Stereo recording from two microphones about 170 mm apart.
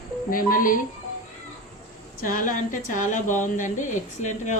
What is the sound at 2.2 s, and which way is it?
A woman's voice, 55° left (ahead or behind).